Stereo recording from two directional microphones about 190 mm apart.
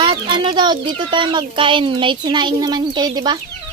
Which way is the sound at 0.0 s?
25° right (ahead or behind).